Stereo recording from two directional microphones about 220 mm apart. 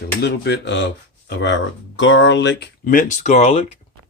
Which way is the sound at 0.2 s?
50° left (ahead or behind).